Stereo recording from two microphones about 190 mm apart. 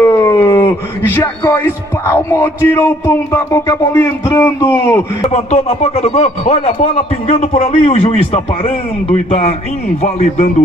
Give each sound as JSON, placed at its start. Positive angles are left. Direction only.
{"t": 0.0, "sound": "a sound", "side_deg": 15}
{"t": 1.1, "sound": "speech", "side_deg": 15}
{"t": 5.2, "sound": "speech", "side_deg": 35}